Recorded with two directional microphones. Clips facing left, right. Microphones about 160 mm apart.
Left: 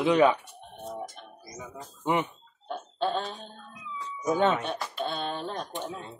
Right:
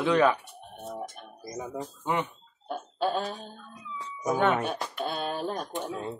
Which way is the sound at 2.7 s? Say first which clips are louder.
Right 1 dB; 5° right (ahead or behind).